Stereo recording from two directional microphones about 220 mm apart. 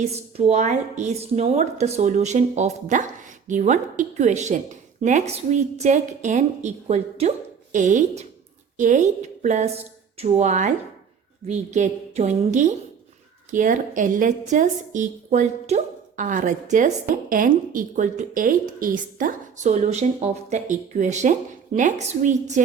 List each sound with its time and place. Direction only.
0.0 s a woman's voice: 30° right (ahead or behind)